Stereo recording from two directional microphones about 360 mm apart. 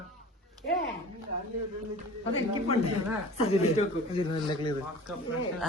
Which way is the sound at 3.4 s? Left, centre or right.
Centre.